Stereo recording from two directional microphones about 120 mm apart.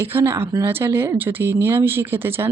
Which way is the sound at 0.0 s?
20° right (ahead or behind).